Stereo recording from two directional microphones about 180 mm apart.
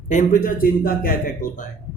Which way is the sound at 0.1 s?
45° left (ahead or behind).